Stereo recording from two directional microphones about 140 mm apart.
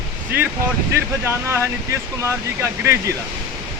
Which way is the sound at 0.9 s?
20° right (ahead or behind).